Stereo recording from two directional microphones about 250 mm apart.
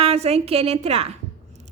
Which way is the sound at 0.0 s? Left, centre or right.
Right.